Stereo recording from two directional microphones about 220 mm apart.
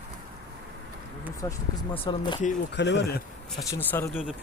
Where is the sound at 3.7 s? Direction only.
10° left (ahead or behind).